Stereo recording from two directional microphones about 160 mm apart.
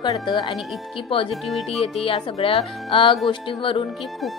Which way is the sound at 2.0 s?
35° left (ahead or behind).